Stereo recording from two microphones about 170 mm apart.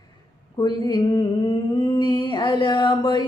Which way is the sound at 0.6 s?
25° left (ahead or behind).